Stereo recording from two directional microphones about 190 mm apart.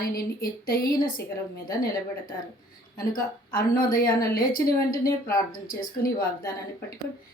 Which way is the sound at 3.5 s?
50° left (ahead or behind).